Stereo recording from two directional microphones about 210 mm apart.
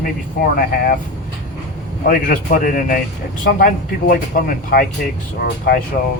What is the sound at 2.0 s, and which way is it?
A man's voice, 40° left (ahead or behind).